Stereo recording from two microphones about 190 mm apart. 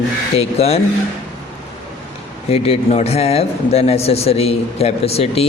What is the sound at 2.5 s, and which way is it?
Speech, 30° left (ahead or behind).